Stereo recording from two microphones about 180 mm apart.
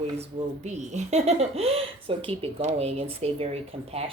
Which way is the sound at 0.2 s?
40° right (ahead or behind).